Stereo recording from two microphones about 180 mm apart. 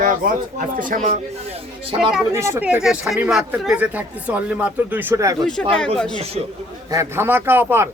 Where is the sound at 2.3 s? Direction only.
15° right (ahead or behind).